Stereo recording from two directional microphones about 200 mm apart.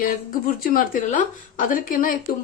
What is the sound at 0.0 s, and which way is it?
Speech, 45° left (ahead or behind).